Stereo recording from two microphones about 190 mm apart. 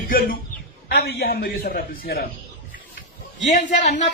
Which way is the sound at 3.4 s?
40° left (ahead or behind).